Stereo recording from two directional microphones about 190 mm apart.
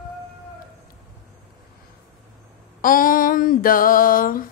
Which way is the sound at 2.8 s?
45° left (ahead or behind).